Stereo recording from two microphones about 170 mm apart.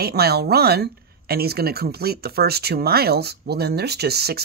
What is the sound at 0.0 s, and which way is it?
Speech, 70° right (ahead or behind).